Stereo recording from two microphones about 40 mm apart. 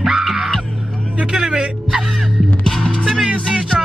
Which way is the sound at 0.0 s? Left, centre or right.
Centre.